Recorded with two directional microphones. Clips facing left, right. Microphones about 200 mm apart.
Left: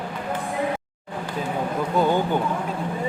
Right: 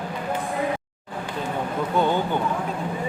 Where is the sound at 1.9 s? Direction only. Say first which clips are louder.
Left 2 dB; 10° left (ahead or behind).